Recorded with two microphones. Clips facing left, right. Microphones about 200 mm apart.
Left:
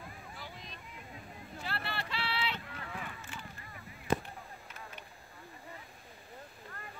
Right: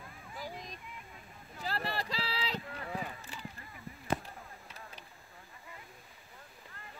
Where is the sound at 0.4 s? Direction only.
45° right (ahead or behind).